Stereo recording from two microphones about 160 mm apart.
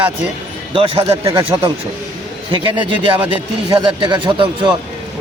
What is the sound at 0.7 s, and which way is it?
Speech, 25° right (ahead or behind).